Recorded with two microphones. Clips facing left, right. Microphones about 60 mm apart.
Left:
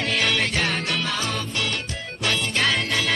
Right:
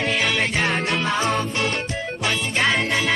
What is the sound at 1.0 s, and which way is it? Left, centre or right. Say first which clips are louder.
Music: right 5 dB; right.